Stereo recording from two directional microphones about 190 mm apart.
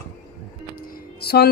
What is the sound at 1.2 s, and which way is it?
Music, 55° left (ahead or behind).